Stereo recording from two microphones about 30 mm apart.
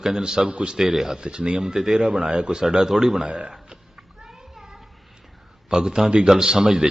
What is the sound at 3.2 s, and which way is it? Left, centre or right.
Speech, right.